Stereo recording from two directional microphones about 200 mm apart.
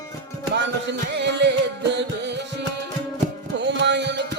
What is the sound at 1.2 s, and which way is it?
Music, 60° right (ahead or behind).